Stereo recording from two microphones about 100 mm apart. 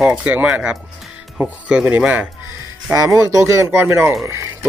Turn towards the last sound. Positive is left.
turn(degrees=-30)  # may be behind; listen again after turning